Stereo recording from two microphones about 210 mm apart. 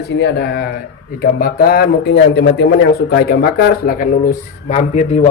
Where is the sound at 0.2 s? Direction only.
50° left (ahead or behind).